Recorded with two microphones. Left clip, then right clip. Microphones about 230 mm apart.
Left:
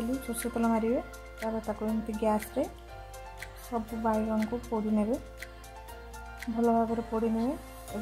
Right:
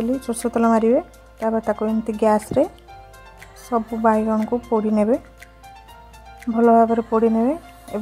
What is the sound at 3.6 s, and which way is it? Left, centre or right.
Speech, right.